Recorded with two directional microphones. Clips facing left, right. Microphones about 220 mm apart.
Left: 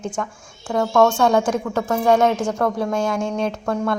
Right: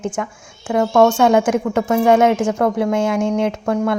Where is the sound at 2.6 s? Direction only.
20° right (ahead or behind).